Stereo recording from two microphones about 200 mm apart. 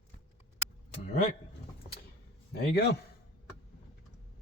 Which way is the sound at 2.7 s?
55° left (ahead or behind).